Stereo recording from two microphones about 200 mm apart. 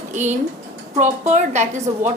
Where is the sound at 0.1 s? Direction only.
35° right (ahead or behind).